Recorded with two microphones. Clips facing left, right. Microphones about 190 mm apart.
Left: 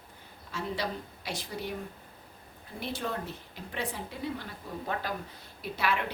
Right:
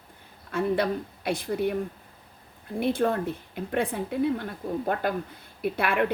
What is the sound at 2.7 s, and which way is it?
Speech, 55° right (ahead or behind).